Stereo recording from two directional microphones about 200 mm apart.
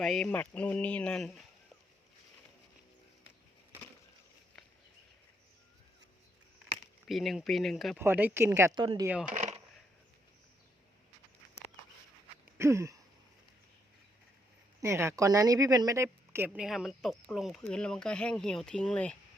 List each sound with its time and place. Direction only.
0.0 s speech: centre (ahead or behind)
7.1 s speech: centre (ahead or behind)
8.0 s speech: 10° right (ahead or behind)
8.8 s speech: 25° right (ahead or behind)
9.3 s a sound: 35° right (ahead or behind)
12.5 s a sound: 15° right (ahead or behind)
14.8 s speech: 15° right (ahead or behind); by 19.1 s 5° left (ahead or behind)